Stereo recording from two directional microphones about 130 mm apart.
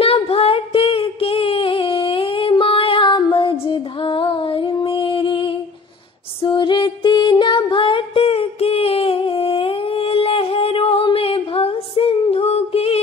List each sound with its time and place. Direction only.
0.0 s a sound: 45° left (ahead or behind)
6.4 s music: 40° left (ahead or behind)
11.1 s female singing: 45° left (ahead or behind)